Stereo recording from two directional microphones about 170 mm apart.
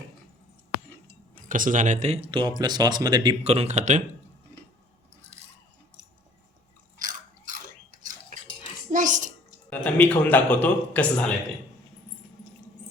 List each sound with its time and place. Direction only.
1.5 s speech: 50° right (ahead or behind); by 3.3 s 25° right (ahead or behind)
3.4 s speech: 40° right (ahead or behind)
7.0 s biting: 50° right (ahead or behind)
8.9 s a sound: 50° right (ahead or behind)
9.6 s speech: 10° left (ahead or behind)